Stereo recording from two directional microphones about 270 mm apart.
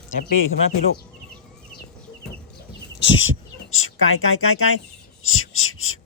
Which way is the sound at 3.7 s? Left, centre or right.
Left.